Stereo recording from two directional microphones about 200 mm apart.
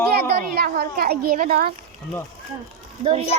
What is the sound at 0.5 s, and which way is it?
Speech, 50° right (ahead or behind).